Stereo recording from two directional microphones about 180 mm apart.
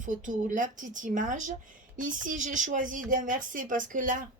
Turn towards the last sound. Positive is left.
turn(degrees=-45)  # may be behind; listen again after turning